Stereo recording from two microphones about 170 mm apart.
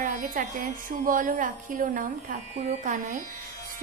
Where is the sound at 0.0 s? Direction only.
50° right (ahead or behind).